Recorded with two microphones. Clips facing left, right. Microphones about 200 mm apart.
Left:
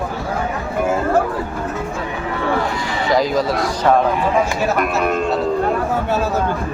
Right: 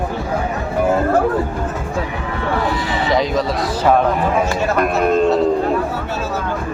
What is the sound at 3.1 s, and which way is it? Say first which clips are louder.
Speech: left 1 dB; centre (ahead or behind).